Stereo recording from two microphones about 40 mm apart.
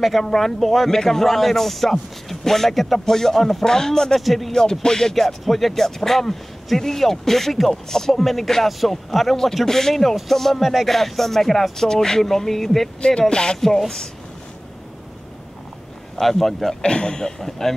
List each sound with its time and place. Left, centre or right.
0.0 s speech: centre
0.3 s speech: centre
4.2 s speech: centre
5.1 s speech: centre
13.3 s a man's voice: left
13.6 s speech: centre
16.2 s speech: centre
16.8 s a man's voice: left
17.4 s speech: centre